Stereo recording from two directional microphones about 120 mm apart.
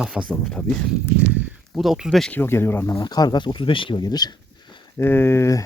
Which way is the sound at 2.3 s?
20° left (ahead or behind).